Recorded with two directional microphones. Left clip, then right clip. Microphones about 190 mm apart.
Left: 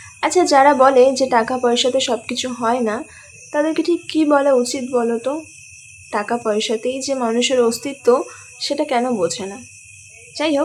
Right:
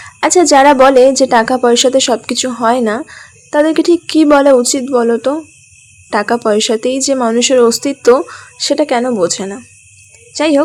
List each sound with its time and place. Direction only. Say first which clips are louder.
0.0 s a woman's voice: right 6 dB; 35° right (ahead or behind)